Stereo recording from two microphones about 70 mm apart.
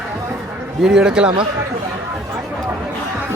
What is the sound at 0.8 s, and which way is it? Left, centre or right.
Speech, centre.